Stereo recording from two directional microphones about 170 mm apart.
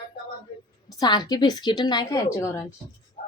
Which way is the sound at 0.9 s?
25° left (ahead or behind).